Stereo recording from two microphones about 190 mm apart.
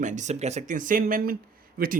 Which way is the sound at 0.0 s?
40° right (ahead or behind).